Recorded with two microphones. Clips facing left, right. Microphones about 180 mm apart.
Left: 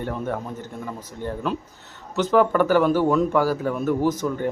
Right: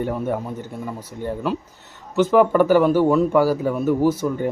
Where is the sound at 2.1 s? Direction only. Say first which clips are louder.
Right 3 dB; 10° right (ahead or behind).